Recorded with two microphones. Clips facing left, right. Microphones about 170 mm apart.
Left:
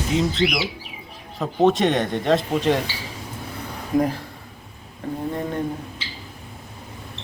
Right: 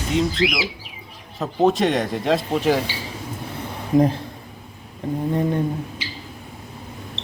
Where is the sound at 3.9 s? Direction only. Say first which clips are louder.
Right 3 dB; 25° right (ahead or behind).